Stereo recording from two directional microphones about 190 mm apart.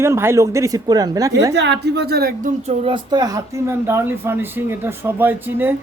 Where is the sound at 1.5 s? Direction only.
65° right (ahead or behind).